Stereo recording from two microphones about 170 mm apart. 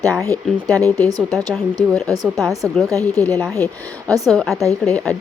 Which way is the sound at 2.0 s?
20° right (ahead or behind).